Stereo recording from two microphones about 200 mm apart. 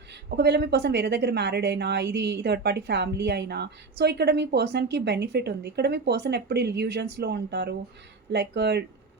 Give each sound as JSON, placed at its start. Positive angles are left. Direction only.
{"t": 0.1, "sound": "a woman's voice", "side_deg": -55}